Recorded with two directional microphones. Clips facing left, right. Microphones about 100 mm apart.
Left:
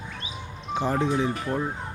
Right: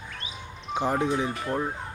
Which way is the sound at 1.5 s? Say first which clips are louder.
Left 1 dB; 5° right (ahead or behind).